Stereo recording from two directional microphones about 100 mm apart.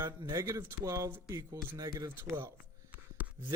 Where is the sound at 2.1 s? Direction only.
25° right (ahead or behind).